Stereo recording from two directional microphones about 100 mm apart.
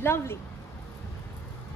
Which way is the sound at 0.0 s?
25° left (ahead or behind).